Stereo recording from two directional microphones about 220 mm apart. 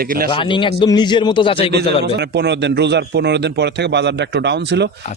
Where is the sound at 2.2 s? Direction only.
50° right (ahead or behind).